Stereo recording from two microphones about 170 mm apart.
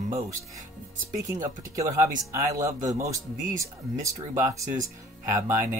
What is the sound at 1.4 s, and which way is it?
Speech, 20° right (ahead or behind).